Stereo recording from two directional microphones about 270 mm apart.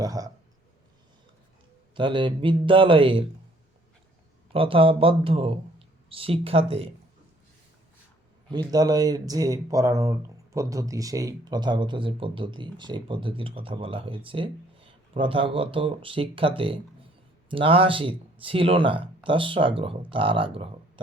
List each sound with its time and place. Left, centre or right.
0.0 s a sound: centre
2.0 s speech: centre
4.5 s speech: centre
8.4 s speech: centre